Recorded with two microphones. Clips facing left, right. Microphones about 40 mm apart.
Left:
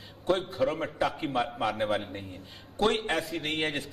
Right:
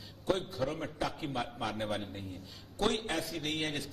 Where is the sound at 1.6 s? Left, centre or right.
Left.